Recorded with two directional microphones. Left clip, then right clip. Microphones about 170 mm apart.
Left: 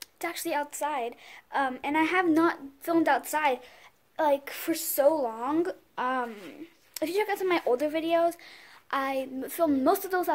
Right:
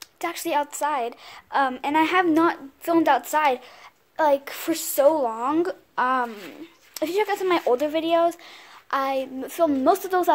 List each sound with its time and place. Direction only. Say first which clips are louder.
0.0 s a woman's voice: right 5 dB; centre (ahead or behind)